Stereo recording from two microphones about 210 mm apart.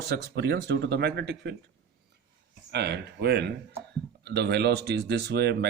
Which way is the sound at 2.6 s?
50° right (ahead or behind).